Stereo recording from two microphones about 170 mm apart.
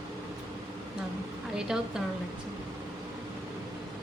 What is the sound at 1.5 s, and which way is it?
Speech, 5° right (ahead or behind).